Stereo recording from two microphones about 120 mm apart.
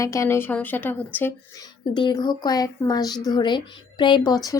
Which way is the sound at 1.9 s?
40° left (ahead or behind).